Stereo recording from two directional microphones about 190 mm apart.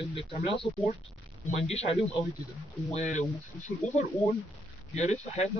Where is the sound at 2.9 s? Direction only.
35° left (ahead or behind).